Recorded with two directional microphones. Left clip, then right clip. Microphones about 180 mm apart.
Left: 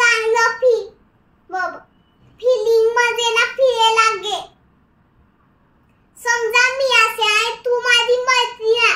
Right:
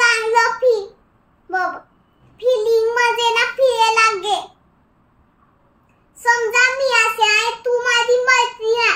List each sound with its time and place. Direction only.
0.0 s child singing: 20° right (ahead or behind)
2.3 s child singing: 20° right (ahead or behind)
6.2 s child singing: 15° right (ahead or behind)